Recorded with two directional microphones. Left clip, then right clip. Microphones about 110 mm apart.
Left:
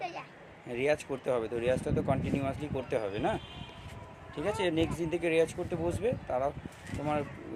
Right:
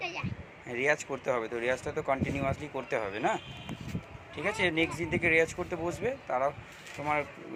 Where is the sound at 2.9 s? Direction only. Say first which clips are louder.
Right 2 dB; 75° left (ahead or behind).